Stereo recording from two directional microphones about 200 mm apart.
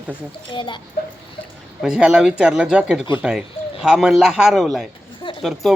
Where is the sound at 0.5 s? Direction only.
25° left (ahead or behind).